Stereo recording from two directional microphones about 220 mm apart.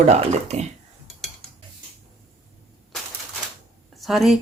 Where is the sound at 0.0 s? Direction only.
30° right (ahead or behind).